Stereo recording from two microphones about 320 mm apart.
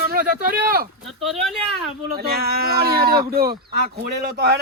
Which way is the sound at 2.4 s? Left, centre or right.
Right.